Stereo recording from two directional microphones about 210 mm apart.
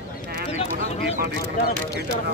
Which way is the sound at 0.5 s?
30° left (ahead or behind).